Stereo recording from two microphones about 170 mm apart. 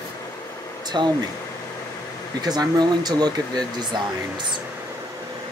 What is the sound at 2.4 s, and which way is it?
Speech, 25° right (ahead or behind).